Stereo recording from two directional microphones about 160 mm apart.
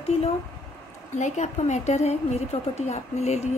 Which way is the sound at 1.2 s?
45° left (ahead or behind).